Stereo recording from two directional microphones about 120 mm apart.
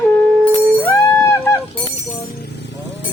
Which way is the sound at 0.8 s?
15° left (ahead or behind).